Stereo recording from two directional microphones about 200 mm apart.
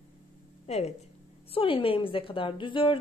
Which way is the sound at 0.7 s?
30° left (ahead or behind).